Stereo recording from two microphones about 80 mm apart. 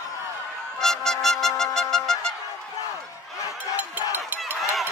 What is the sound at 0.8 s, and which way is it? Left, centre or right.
Music, centre.